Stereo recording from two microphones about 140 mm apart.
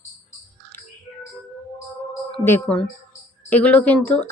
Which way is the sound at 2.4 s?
15° left (ahead or behind).